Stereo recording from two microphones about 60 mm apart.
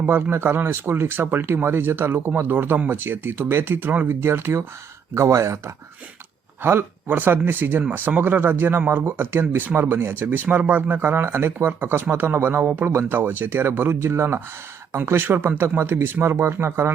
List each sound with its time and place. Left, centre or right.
0.0 s speech: right
0.3 s speech: right
4.2 s speech: right
5.1 s speech: right
6.6 s speech: right